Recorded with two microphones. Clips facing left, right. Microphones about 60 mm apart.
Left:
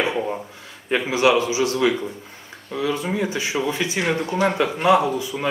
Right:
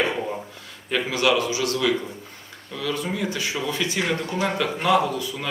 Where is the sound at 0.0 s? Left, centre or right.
Centre.